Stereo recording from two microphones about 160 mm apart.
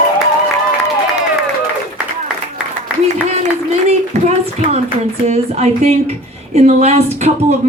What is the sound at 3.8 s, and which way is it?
A woman's voice, 40° right (ahead or behind).